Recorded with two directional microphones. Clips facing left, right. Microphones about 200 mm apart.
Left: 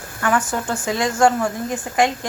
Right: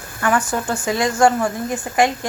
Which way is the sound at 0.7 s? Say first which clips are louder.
Right 1 dB; centre (ahead or behind).